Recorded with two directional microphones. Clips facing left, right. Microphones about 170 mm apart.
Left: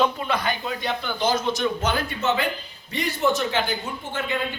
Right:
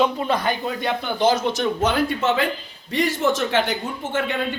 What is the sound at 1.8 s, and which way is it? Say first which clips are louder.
A man's voice: right 5 dB; 90° right.